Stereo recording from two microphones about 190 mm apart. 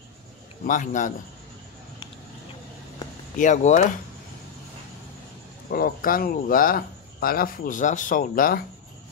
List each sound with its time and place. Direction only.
0.7 s speech: 40° left (ahead or behind)
3.3 s speech: 40° left (ahead or behind)
5.7 s speech: 50° left (ahead or behind)